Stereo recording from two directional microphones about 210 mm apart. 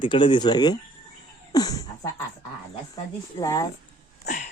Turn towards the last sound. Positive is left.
turn(degrees=35)  # may be behind; listen again after turning